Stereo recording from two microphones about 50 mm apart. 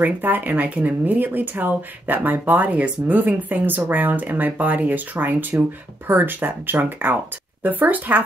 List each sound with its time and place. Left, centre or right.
0.0 s speech: right